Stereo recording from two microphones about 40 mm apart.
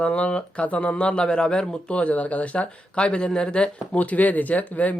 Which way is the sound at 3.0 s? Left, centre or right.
Left.